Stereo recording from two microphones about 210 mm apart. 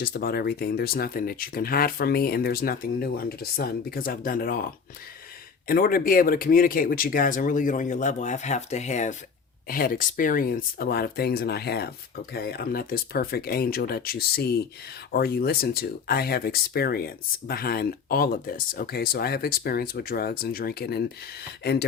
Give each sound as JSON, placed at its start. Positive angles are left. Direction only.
{"t": 0.0, "sound": "speech", "side_deg": 45}